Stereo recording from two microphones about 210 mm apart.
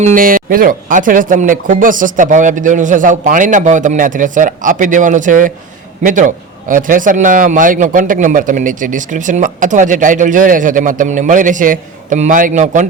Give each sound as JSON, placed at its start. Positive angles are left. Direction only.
{"t": 0.0, "sound": "a man's voice", "side_deg": -40}